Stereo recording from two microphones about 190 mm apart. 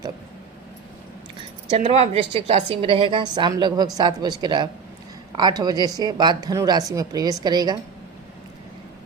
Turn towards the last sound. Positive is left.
turn(degrees=-20)  # may be behind; listen again after turning